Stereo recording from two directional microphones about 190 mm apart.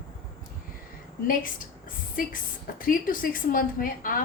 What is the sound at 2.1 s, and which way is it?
A woman's voice, 45° left (ahead or behind).